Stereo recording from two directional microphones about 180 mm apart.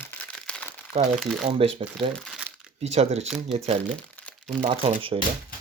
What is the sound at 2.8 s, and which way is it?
Speech, 35° right (ahead or behind).